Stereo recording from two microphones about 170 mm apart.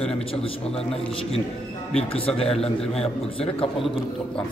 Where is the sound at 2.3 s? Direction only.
35° left (ahead or behind).